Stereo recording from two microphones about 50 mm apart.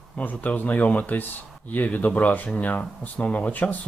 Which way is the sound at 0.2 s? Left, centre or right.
Left.